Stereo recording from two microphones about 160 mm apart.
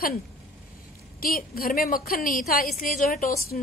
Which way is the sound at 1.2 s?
65° left (ahead or behind).